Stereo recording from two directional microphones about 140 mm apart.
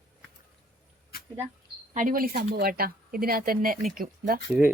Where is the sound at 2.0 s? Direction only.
80° right.